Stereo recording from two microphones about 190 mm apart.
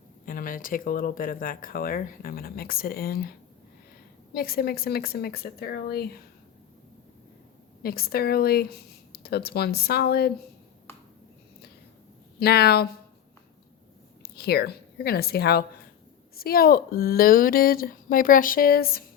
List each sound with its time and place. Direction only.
0.3 s speech: 45° left (ahead or behind)
4.4 s speech: 55° left (ahead or behind)
7.8 s speech: 55° left (ahead or behind)
12.4 s speech: 55° left (ahead or behind)
14.2 s a woman's voice: 55° left (ahead or behind)